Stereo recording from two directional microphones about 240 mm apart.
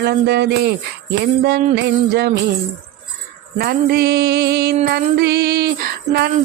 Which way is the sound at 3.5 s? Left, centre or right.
Right.